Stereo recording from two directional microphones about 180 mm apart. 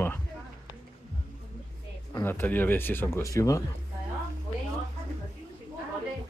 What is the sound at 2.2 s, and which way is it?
Speech, 10° left (ahead or behind).